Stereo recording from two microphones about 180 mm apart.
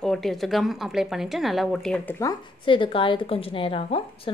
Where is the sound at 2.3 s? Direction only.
25° left (ahead or behind).